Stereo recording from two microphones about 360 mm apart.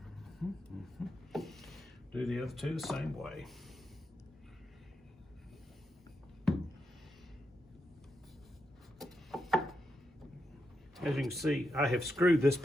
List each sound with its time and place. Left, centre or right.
0.4 s speech: centre
9.0 s a sound: centre
10.9 s speech: centre